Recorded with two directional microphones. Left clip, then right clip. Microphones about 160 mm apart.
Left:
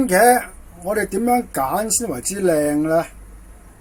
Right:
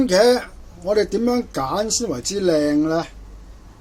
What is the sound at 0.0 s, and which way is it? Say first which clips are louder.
Speech: left 1 dB; 5° left (ahead or behind).